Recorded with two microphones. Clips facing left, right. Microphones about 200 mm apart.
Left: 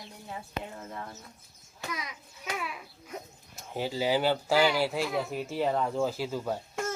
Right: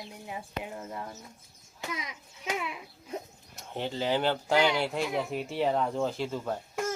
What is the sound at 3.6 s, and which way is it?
Speech, 5° left (ahead or behind).